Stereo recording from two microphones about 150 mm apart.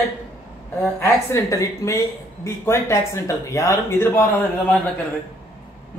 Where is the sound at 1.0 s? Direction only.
20° left (ahead or behind).